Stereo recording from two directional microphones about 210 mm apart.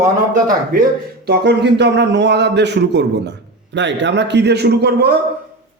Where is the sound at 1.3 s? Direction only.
55° right (ahead or behind).